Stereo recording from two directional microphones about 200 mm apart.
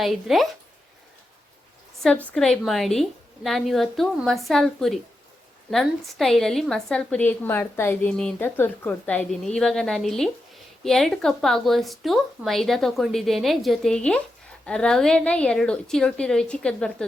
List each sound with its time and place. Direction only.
0.0 s a woman's voice: centre (ahead or behind)
2.0 s a woman's voice: 5° left (ahead or behind)